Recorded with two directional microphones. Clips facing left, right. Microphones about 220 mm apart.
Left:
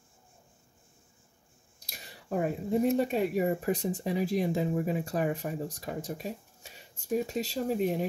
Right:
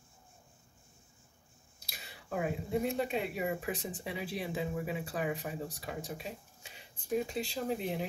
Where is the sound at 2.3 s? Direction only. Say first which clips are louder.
Left 5 dB; 40° left (ahead or behind).